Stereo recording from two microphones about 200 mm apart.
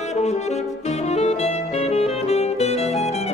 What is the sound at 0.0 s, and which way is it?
Saxophone, 35° left (ahead or behind).